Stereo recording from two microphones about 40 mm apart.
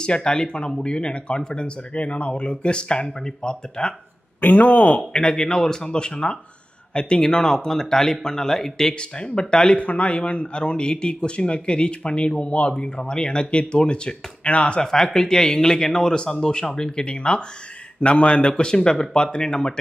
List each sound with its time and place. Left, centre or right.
0.0 s speech: left
4.4 s speech: left
4.6 s speech: left
5.1 s speech: left
9.8 s speech: left
14.8 s speech: centre